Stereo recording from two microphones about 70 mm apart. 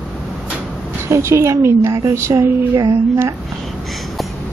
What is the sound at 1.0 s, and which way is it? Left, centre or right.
A woman's voice, right.